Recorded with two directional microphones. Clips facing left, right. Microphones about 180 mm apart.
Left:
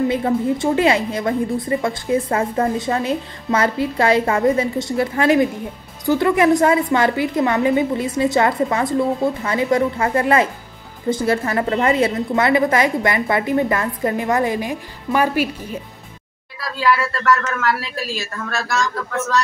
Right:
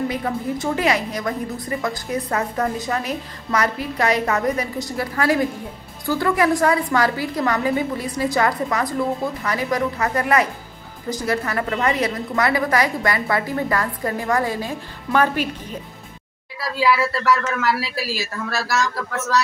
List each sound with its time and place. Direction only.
0.1 s a woman's voice: 25° left (ahead or behind); by 15.8 s 10° left (ahead or behind)
16.5 s speech: 10° right (ahead or behind)